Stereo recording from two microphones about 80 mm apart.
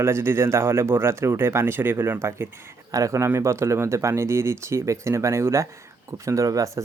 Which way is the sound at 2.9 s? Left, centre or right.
Right.